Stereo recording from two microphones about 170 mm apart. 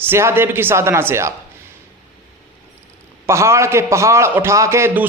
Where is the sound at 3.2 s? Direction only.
15° right (ahead or behind).